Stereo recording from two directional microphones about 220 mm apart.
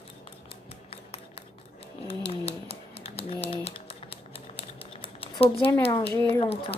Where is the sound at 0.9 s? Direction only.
25° left (ahead or behind).